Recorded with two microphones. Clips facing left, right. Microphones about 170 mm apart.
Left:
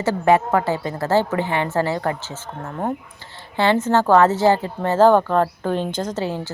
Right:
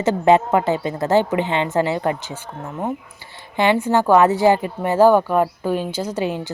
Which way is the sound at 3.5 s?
15° right (ahead or behind).